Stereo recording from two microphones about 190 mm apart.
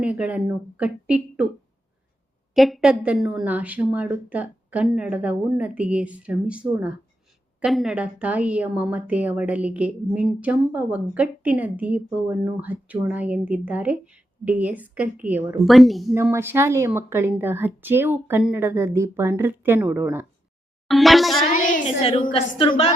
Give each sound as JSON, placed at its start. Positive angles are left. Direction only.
{"t": 0.0, "sound": "a woman's voice", "side_deg": -5}
{"t": 2.6, "sound": "a woman's voice", "side_deg": 0}
{"t": 16.1, "sound": "a woman's voice", "side_deg": -15}
{"t": 20.8, "sound": "a sound", "side_deg": 0}
{"t": 21.5, "sound": "a sound", "side_deg": 45}
{"t": 22.0, "sound": "a woman's voice", "side_deg": 25}